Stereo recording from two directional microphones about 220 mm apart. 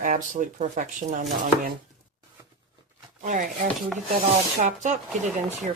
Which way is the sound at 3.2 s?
35° right (ahead or behind).